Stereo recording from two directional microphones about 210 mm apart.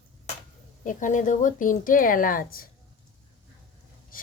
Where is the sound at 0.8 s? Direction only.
40° left (ahead or behind).